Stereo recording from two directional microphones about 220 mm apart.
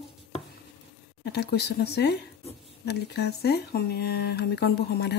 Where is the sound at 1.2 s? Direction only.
50° left (ahead or behind).